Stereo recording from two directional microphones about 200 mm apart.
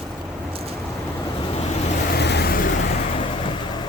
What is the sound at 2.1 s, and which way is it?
Vehicle, 55° left (ahead or behind).